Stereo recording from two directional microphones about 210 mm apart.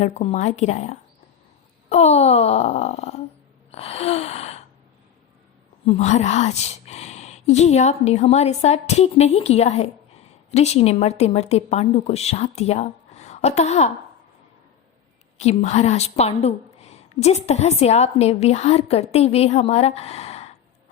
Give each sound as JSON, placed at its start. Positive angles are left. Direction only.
{"t": 0.0, "sound": "a woman's voice", "side_deg": 30}
{"t": 3.7, "sound": "gasp", "side_deg": 30}
{"t": 5.8, "sound": "a woman's voice", "side_deg": 30}
{"t": 15.4, "sound": "a woman's voice", "side_deg": 30}